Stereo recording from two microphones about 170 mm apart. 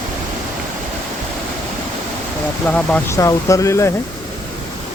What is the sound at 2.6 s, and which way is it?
Speech, 5° left (ahead or behind).